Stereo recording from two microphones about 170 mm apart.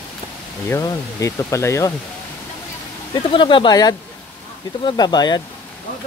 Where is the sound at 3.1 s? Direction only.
30° left (ahead or behind).